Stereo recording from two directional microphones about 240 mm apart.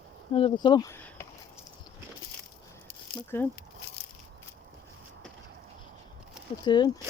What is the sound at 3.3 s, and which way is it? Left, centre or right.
Speech, centre.